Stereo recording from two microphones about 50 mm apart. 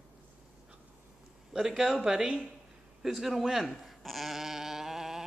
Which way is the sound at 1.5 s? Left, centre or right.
Centre.